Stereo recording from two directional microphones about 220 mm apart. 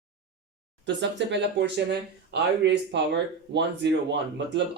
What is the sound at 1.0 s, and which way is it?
Speech, 55° right (ahead or behind).